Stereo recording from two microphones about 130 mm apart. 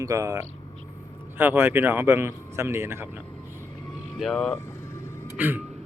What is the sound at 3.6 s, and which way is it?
Vehicle, 25° left (ahead or behind).